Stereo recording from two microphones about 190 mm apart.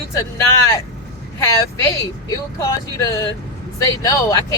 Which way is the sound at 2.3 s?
15° left (ahead or behind).